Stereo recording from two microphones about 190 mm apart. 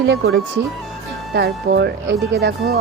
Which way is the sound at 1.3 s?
60° right (ahead or behind).